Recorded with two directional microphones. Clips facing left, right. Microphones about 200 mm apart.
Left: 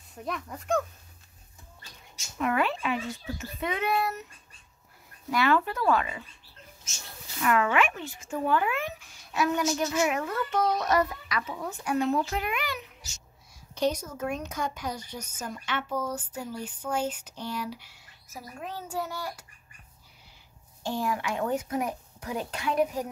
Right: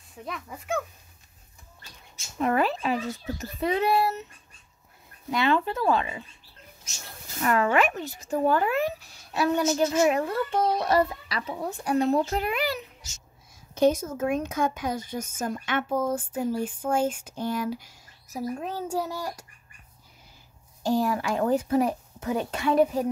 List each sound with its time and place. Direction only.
0.1 s speech: centre (ahead or behind)
2.3 s speech: 35° right (ahead or behind)
5.3 s speech: 20° right (ahead or behind)
7.3 s speech: 40° right (ahead or behind)
13.7 s speech: 50° right (ahead or behind)
20.8 s speech: 40° right (ahead or behind)